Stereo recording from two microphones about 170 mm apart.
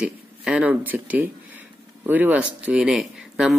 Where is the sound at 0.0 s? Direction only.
5° right (ahead or behind).